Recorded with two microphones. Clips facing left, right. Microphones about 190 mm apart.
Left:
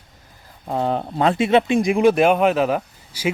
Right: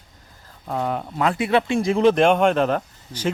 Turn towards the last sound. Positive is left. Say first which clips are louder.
# left 1 dB
turn(degrees=10)  # may be behind; listen again after turning